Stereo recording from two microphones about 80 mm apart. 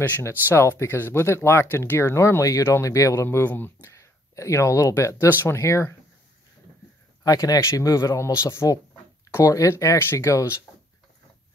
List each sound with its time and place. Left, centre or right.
0.2 s speech: left
3.2 s speech: left
3.9 s a sound: left
4.9 s speech: left
7.2 s speech: left